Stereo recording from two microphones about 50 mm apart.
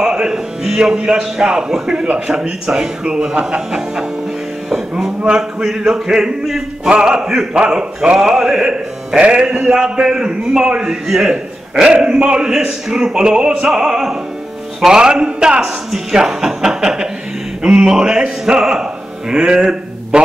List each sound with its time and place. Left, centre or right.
0.0 s music: centre
0.9 s a man's voice: centre
4.6 s music: centre
5.2 s a man's voice: centre
6.9 s a man's voice: centre
15.6 s a man's voice: centre